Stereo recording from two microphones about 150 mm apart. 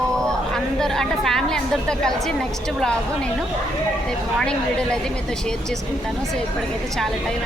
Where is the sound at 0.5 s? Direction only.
5° left (ahead or behind).